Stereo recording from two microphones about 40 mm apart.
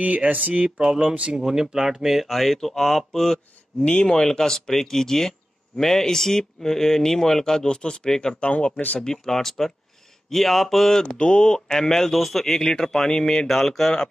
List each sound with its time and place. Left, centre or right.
0.0 s speech: right
0.7 s speech: centre
1.0 s speech: right
1.4 s speech: centre
2.2 s speech: centre
3.8 s speech: left
8.4 s speech: left
9.0 s speech: centre
11.1 s speech: left
11.6 s speech: centre